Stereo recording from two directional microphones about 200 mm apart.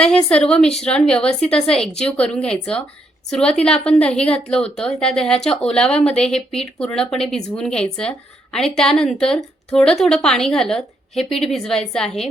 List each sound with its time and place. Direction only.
0.0 s a woman's voice: 5° left (ahead or behind)